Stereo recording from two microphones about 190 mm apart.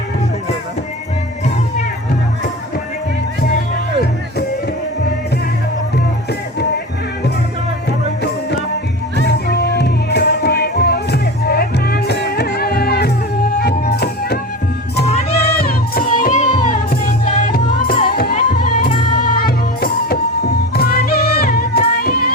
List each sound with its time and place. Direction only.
7.9 s music: 60° left (ahead or behind)
15.4 s music: 55° left (ahead or behind)